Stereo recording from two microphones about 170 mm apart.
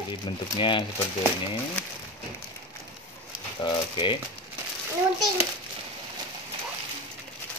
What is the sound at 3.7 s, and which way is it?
Speech, 30° left (ahead or behind).